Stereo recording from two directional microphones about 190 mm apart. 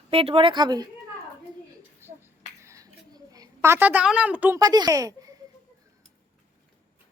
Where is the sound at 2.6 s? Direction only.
15° right (ahead or behind).